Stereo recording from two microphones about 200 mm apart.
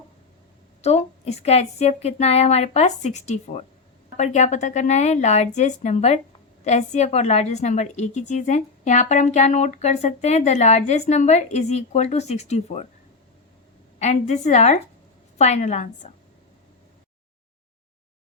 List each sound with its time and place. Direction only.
0.8 s a woman's voice: 35° left (ahead or behind)
14.0 s a woman's voice: 35° left (ahead or behind)